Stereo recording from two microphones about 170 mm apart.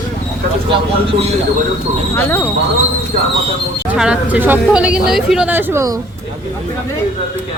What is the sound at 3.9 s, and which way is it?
Speech, 5° right (ahead or behind).